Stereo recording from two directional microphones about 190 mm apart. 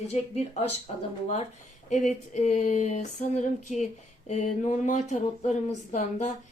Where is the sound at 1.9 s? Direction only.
40° left (ahead or behind).